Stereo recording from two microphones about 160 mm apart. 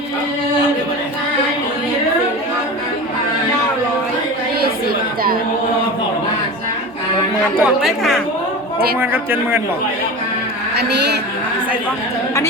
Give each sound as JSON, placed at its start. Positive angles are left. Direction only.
{"t": 7.6, "sound": "speech", "side_deg": 0}
{"t": 9.0, "sound": "a man's voice", "side_deg": -15}
{"t": 10.8, "sound": "a woman's voice", "side_deg": -90}